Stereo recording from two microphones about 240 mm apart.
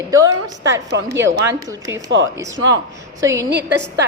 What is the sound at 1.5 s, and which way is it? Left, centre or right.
Speech, centre.